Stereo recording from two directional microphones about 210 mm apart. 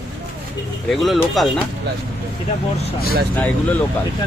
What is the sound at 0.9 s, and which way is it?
Speech, centre (ahead or behind).